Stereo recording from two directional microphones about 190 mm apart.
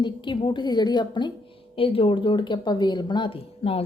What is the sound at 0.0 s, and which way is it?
Speech, 25° left (ahead or behind).